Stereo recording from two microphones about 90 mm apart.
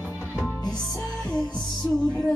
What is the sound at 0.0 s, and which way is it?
Music, 20° right (ahead or behind).